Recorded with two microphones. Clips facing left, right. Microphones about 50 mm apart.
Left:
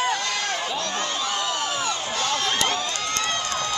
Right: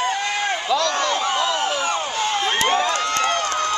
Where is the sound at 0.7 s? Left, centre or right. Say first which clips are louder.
Right 7 dB; right.